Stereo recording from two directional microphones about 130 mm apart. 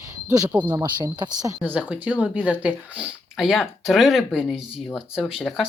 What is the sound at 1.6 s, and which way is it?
Speech, 10° right (ahead or behind).